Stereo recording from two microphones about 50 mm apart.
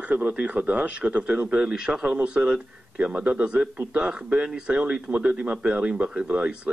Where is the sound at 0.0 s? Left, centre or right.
Right.